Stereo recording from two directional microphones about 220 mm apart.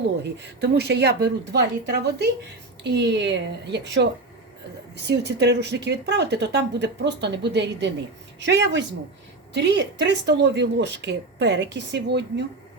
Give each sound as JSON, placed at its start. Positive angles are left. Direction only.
{"t": 0.2, "sound": "speech", "side_deg": -50}